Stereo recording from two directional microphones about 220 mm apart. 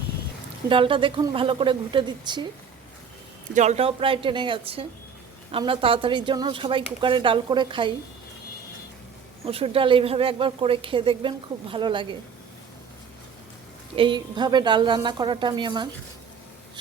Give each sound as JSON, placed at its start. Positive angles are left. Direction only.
{"t": 0.7, "sound": "a woman's voice", "side_deg": -25}
{"t": 3.5, "sound": "a woman's voice", "side_deg": -30}
{"t": 9.5, "sound": "a woman's voice", "side_deg": -25}
{"t": 13.9, "sound": "a woman's voice", "side_deg": -20}